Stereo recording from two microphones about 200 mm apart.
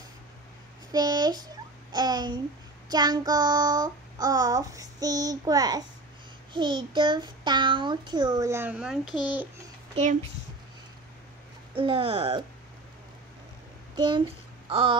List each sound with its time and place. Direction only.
0.9 s a child's voice: 20° right (ahead or behind)
11.7 s a child's voice: 25° right (ahead or behind)
13.9 s a child's voice: 25° right (ahead or behind)
14.7 s a sound: 25° right (ahead or behind)